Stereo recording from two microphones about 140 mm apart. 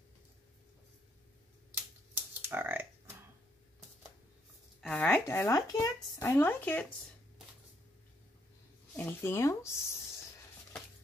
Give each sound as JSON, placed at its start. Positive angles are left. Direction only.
{"t": 2.4, "sound": "speech", "side_deg": -15}
{"t": 4.8, "sound": "speech", "side_deg": 10}
{"t": 8.9, "sound": "speech", "side_deg": 15}